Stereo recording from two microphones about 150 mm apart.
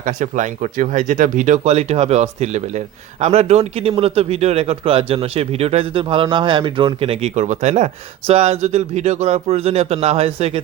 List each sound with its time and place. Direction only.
0.0 s speech: 60° right (ahead or behind); by 10.6 s 40° right (ahead or behind)